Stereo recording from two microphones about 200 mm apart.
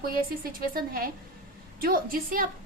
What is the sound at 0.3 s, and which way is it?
A woman's voice, 45° right (ahead or behind).